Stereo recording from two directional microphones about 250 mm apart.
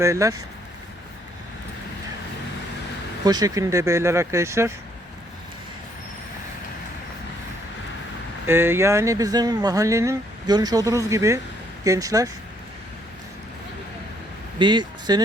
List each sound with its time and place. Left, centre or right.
0.0 s speech: centre
3.2 s speech: centre
8.4 s speech: centre
14.6 s speech: centre